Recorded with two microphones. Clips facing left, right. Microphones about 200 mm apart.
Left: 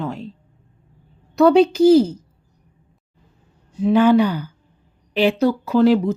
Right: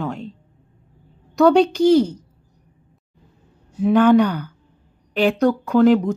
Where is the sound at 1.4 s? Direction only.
5° left (ahead or behind).